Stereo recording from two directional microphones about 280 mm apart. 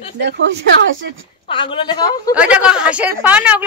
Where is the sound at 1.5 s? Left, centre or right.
Centre.